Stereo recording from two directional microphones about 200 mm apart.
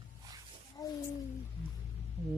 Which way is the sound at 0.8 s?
15° left (ahead or behind).